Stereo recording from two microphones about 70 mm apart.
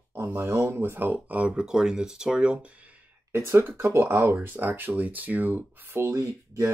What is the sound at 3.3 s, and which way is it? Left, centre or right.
Speech, right.